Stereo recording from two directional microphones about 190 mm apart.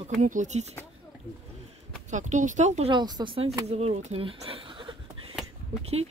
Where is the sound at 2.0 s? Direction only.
40° right (ahead or behind).